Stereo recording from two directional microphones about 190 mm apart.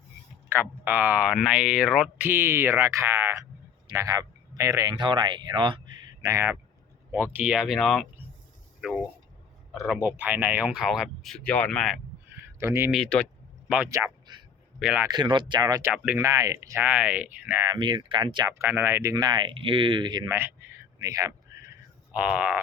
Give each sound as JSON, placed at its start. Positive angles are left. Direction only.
{"t": 0.5, "sound": "speech", "side_deg": -10}
{"t": 12.5, "sound": "speech", "side_deg": -15}
{"t": 12.9, "sound": "speech", "side_deg": 0}
{"t": 13.7, "sound": "speech", "side_deg": -10}
{"t": 15.0, "sound": "speech", "side_deg": -25}
{"t": 17.7, "sound": "speech", "side_deg": -25}
{"t": 18.6, "sound": "speech", "side_deg": -10}
{"t": 22.1, "sound": "speech", "side_deg": -5}